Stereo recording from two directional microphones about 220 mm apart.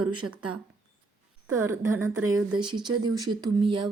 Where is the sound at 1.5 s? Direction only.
15° right (ahead or behind).